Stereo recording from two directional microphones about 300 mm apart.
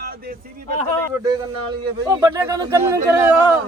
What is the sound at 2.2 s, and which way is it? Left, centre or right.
Speech, centre.